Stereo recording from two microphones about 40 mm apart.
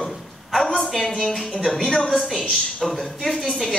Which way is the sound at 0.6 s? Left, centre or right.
Centre.